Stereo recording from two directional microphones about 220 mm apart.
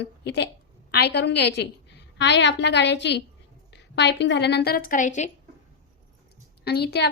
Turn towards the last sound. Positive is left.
turn(degrees=50)  # may be behind; listen again after turning